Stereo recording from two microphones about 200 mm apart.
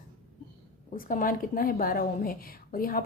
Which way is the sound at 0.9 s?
45° left (ahead or behind).